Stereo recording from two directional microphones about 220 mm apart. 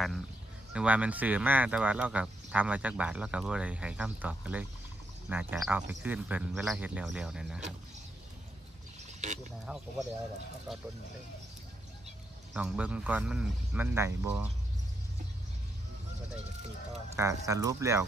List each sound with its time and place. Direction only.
0.7 s speech: 5° right (ahead or behind)
9.2 s speech: 30° right (ahead or behind)
9.7 s speech: 5° right (ahead or behind)
12.5 s speech: 5° right (ahead or behind)
17.1 s speech: 15° right (ahead or behind)